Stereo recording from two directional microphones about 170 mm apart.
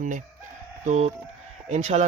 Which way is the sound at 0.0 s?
50° right (ahead or behind).